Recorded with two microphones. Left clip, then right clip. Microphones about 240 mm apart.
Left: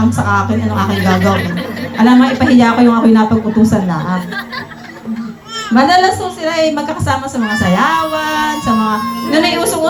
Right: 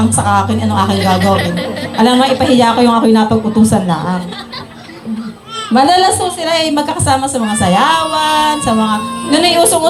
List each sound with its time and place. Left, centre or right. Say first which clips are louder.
0.2 s a man's voice: right 2 dB; right
5.7 s a man's voice: right 1 dB; right